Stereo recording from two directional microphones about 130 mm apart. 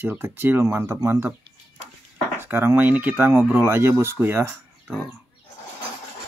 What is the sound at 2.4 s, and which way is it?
Speech, 15° right (ahead or behind).